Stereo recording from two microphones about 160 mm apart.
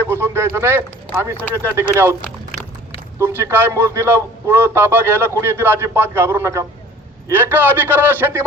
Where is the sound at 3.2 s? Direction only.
15° right (ahead or behind).